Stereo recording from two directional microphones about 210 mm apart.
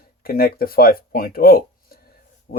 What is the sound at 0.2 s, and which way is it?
Speech, 45° left (ahead or behind).